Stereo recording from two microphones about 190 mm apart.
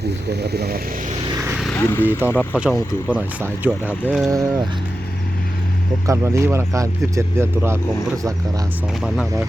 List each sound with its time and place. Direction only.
0.3 s speech: 60° right (ahead or behind)
1.7 s speech: 10° left (ahead or behind)
3.1 s speech: 10° right (ahead or behind)
4.3 s speech: 15° right (ahead or behind)
6.1 s speech: 15° right (ahead or behind)